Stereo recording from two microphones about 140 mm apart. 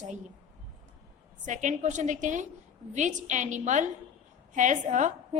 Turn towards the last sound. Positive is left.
turn(degrees=-60)  # may be behind; listen again after turning